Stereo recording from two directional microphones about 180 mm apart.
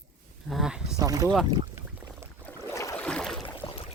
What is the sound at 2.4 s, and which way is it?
Boat, 15° left (ahead or behind).